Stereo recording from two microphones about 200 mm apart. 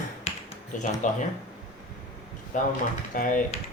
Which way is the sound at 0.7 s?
40° left (ahead or behind).